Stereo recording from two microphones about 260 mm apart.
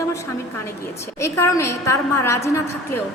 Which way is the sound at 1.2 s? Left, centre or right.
Centre.